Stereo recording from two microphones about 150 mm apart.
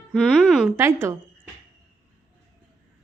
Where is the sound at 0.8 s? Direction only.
20° right (ahead or behind).